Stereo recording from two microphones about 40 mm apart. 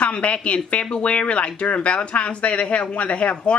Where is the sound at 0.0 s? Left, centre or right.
Left.